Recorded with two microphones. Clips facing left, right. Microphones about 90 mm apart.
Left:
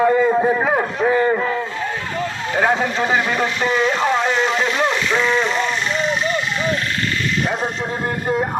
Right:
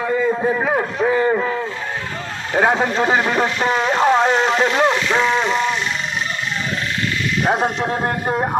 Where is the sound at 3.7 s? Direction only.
30° right (ahead or behind).